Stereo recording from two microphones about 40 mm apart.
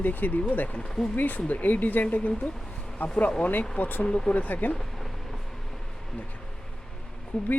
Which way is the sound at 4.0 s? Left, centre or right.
Left.